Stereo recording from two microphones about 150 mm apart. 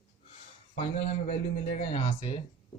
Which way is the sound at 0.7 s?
45° left (ahead or behind).